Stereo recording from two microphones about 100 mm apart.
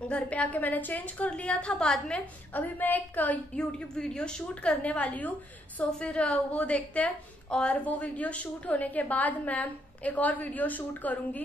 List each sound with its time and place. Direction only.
0.1 s a woman's voice: 15° left (ahead or behind)